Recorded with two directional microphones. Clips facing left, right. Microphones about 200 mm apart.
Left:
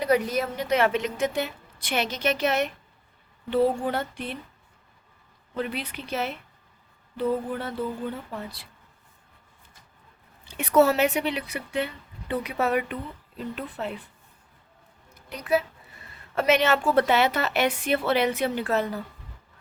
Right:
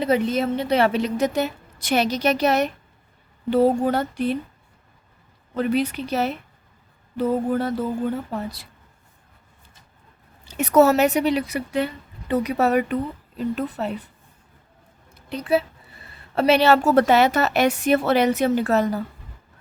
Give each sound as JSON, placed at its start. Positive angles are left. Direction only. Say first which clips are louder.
{"t": 0.0, "sound": "a woman's voice", "louder": "right 3 dB", "side_deg": -25}
{"t": 5.5, "sound": "a woman's voice", "louder": "right 9 dB", "side_deg": -40}
{"t": 10.4, "sound": "a woman's voice", "louder": "right 4 dB", "side_deg": -40}
{"t": 15.1, "sound": "a woman's voice", "louder": "right 4 dB", "side_deg": -25}